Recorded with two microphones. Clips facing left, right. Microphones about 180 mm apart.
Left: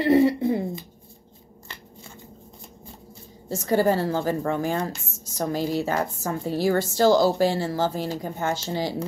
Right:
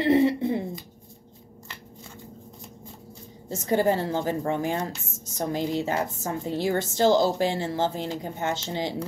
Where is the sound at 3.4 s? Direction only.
20° right (ahead or behind).